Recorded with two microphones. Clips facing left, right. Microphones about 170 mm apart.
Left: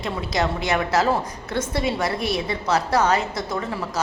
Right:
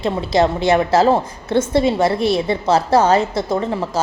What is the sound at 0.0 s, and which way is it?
A woman's voice, 30° right (ahead or behind).